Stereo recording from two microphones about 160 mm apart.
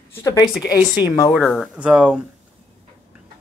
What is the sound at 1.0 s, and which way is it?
Speech, 10° right (ahead or behind).